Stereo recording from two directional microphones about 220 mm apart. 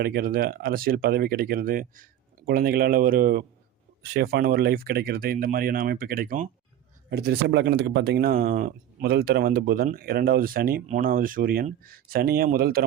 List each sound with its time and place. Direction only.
0.0 s speech: 45° right (ahead or behind)